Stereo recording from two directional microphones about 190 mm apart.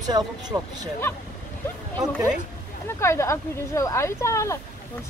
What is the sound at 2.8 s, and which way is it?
Speech, 15° left (ahead or behind).